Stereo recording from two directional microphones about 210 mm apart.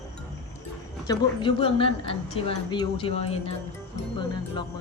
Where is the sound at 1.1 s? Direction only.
25° left (ahead or behind).